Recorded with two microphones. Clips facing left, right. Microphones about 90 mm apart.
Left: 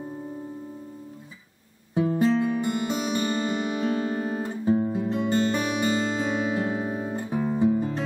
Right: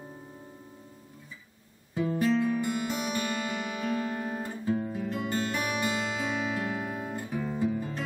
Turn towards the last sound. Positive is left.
turn(degrees=25)  # may be behind; listen again after turning